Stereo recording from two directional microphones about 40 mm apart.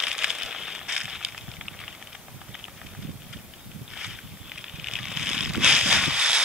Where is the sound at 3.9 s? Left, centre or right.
Centre.